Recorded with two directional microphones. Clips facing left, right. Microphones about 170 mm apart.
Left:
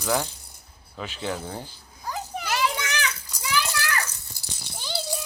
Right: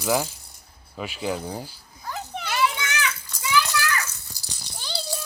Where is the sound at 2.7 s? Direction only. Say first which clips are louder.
Even; 35° left (ahead or behind).